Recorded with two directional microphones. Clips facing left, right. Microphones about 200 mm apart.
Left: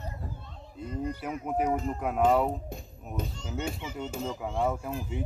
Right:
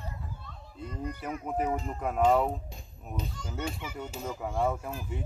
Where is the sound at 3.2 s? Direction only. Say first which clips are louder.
Left 3 dB; 50° left (ahead or behind).